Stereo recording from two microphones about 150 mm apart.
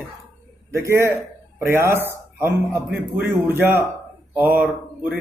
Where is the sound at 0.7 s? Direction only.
20° right (ahead or behind).